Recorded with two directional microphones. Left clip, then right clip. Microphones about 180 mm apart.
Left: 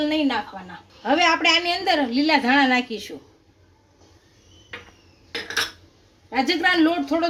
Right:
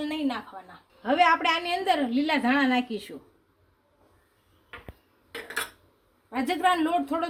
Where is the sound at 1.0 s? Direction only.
45° right (ahead or behind).